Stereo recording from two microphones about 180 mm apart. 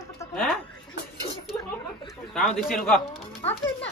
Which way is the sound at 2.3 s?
Centre (ahead or behind).